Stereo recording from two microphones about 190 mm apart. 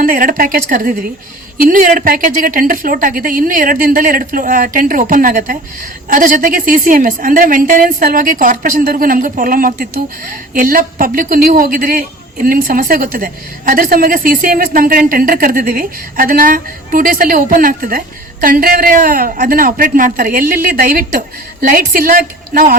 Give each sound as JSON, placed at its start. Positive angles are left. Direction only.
{"t": 0.0, "sound": "a woman's voice", "side_deg": -50}